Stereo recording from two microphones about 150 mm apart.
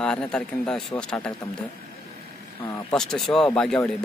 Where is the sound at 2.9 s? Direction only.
5° left (ahead or behind).